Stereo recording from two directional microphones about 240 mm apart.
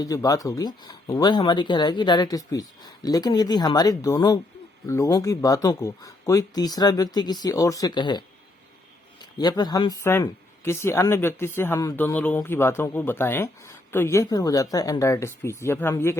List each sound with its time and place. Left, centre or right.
0.0 s speech: centre
9.4 s speech: centre